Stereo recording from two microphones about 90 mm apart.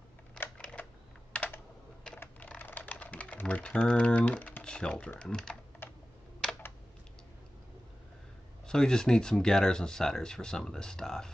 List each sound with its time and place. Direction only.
0.6 s typing: 10° left (ahead or behind)
1.3 s computer keyboard: 15° left (ahead or behind)
2.1 s typing: 15° left (ahead or behind)
5.2 s speech: 5° left (ahead or behind)
8.6 s speech: 5° left (ahead or behind)